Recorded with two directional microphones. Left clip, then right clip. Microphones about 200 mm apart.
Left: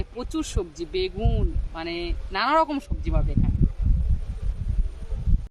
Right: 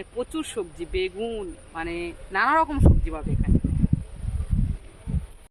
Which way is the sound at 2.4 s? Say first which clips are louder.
Left 1 dB; 40° left (ahead or behind).